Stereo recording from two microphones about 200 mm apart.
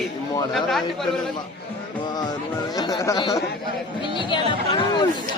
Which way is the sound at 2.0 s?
20° left (ahead or behind).